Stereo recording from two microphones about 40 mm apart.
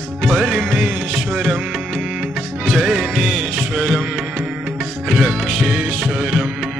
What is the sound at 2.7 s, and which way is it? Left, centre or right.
Music, centre.